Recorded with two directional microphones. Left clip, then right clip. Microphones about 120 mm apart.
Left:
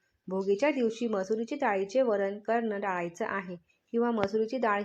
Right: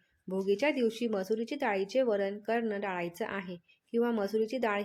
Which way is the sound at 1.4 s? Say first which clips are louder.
Left 2 dB; 40° right (ahead or behind).